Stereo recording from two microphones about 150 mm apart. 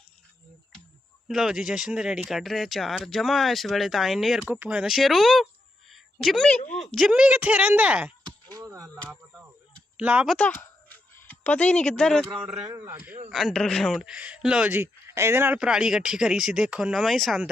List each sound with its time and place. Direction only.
1.3 s speech: 5° right (ahead or behind)
5.9 s a sound: centre (ahead or behind)
6.7 s a woman's voice: 5° left (ahead or behind)
8.6 s a sound: 20° right (ahead or behind)
10.0 s a woman's voice: 10° right (ahead or behind)
10.3 s speech: 10° left (ahead or behind)
12.6 s a woman's voice: 20° right (ahead or behind)
13.3 s speech: centre (ahead or behind)